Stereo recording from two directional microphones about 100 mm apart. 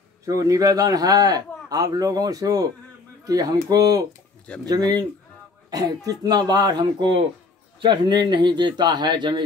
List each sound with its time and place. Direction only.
0.2 s a man's voice: 35° right (ahead or behind)